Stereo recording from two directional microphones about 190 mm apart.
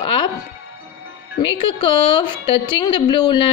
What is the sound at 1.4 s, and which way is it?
A woman's voice, 25° left (ahead or behind).